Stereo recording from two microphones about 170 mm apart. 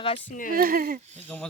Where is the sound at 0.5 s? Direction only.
55° right (ahead or behind).